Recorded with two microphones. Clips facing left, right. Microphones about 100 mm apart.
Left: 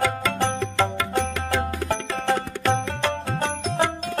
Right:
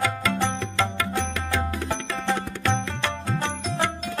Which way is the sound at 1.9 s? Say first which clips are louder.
Left 4 dB; 40° left (ahead or behind).